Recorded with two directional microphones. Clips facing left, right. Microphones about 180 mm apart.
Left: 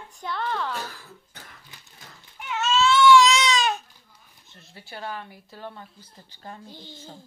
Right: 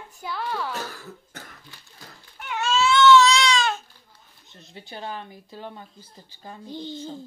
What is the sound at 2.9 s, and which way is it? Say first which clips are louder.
Baby cry: right 1 dB; 10° left (ahead or behind).